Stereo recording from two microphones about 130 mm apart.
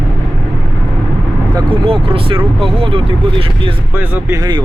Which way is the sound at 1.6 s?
45° right (ahead or behind).